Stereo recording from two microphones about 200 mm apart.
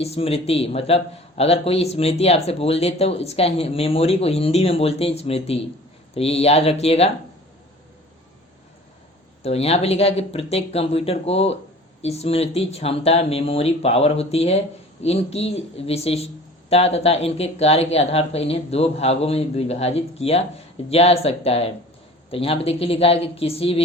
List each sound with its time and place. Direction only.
0.0 s a man's voice: 30° left (ahead or behind)
9.4 s a man's voice: 30° left (ahead or behind)